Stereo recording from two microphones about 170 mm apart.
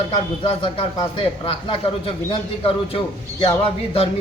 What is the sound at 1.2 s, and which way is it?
Speech, 30° left (ahead or behind).